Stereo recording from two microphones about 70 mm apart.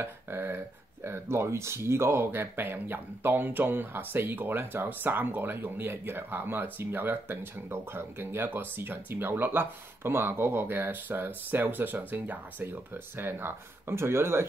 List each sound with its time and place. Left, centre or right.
0.0 s speech: right